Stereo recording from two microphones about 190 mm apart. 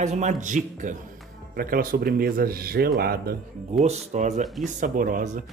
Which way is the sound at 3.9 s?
40° right (ahead or behind).